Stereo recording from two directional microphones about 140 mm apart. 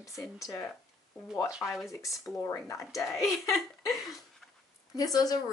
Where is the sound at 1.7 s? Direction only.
Centre (ahead or behind).